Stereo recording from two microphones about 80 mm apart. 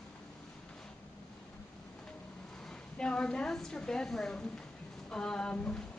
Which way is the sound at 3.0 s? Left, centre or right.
Centre.